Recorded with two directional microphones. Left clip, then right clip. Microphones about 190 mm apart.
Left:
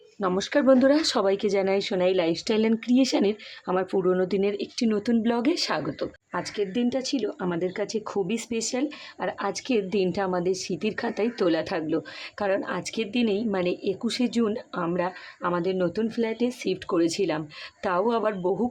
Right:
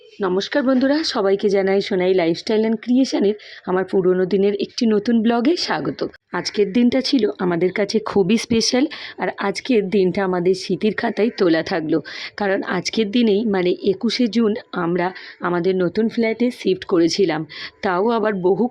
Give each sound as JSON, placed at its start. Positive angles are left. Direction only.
{"t": 0.2, "sound": "speech", "side_deg": -10}